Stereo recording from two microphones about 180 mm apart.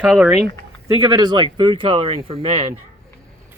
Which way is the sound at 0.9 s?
20° right (ahead or behind).